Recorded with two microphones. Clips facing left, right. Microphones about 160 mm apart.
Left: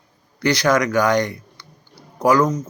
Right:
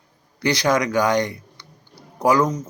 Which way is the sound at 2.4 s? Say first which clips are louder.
Left 2 dB; 10° right (ahead or behind).